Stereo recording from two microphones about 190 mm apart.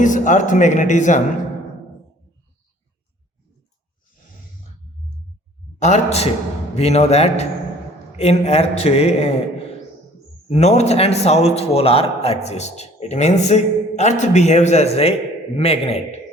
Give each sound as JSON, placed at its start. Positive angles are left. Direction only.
{"t": 0.0, "sound": "a man's voice", "side_deg": 40}
{"t": 5.8, "sound": "a man's voice", "side_deg": 35}
{"t": 10.5, "sound": "a man's voice", "side_deg": 35}